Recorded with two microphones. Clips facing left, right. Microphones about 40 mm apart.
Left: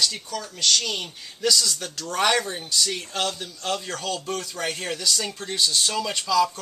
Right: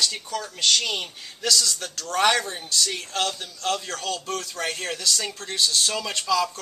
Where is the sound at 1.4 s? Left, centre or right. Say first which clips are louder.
Left 1 dB; centre.